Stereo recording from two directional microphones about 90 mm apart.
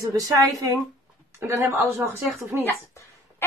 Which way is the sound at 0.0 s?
40° right (ahead or behind).